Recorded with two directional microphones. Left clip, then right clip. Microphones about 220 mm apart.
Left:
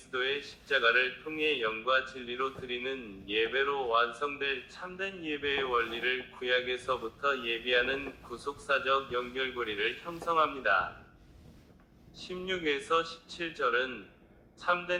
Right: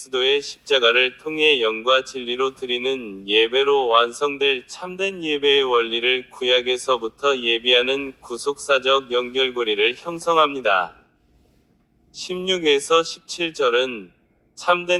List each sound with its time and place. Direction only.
0.1 s speech: 50° right (ahead or behind)
12.1 s speech: 50° right (ahead or behind)